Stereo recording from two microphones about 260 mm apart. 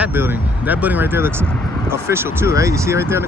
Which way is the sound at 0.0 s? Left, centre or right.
Centre.